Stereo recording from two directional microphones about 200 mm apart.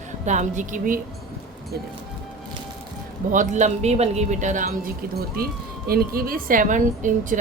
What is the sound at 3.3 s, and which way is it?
A woman's voice, 40° right (ahead or behind).